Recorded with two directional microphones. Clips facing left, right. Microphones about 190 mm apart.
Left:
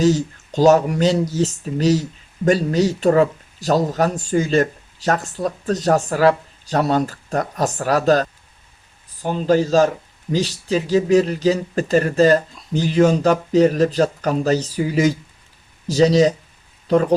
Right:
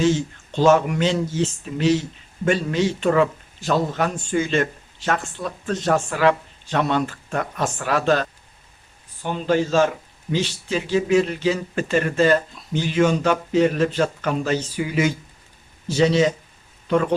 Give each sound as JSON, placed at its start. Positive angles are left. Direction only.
{"t": 0.0, "sound": "speech", "side_deg": 40}